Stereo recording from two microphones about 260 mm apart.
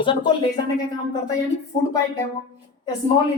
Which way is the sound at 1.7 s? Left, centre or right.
Centre.